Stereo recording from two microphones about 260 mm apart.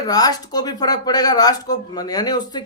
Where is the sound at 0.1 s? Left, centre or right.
Centre.